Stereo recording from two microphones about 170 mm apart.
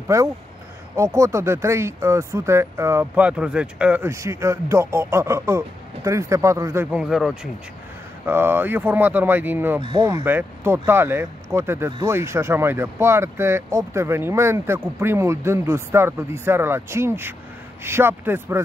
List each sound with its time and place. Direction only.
0.1 s speech: 15° right (ahead or behind); by 7.3 s centre (ahead or behind)
8.3 s speech: 15° right (ahead or behind)
9.8 s speech: 30° right (ahead or behind)
10.0 s speech: 15° right (ahead or behind)